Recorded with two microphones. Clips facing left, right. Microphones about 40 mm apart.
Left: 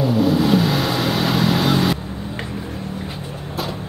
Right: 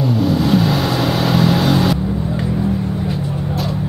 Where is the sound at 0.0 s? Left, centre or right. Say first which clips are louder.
Even; centre.